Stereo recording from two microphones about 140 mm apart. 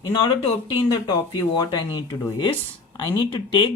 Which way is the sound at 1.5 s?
30° left (ahead or behind).